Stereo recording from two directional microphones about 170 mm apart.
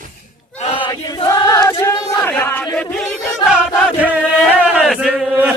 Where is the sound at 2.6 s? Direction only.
5° left (ahead or behind).